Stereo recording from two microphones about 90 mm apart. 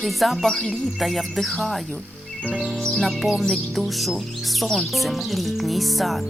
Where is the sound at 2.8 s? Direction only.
5° left (ahead or behind).